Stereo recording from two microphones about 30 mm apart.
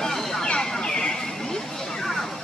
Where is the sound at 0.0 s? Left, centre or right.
Centre.